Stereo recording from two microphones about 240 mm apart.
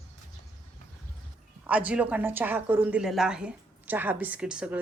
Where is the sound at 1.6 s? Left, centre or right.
Centre.